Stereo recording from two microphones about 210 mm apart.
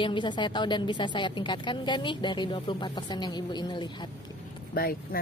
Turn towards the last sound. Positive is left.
turn(degrees=45)  # may be behind; listen again after turning